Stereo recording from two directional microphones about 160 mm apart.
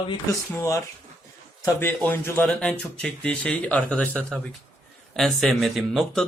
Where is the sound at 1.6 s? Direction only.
15° left (ahead or behind).